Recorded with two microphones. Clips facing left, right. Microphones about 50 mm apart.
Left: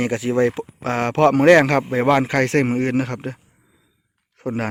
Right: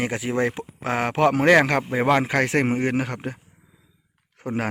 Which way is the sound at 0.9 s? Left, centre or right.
Centre.